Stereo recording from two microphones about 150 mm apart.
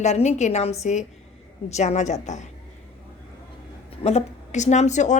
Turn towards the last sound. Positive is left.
turn(degrees=50)  # may be behind; listen again after turning